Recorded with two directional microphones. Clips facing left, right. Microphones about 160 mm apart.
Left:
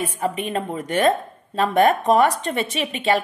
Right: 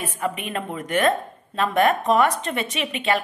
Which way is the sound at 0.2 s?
35° left (ahead or behind).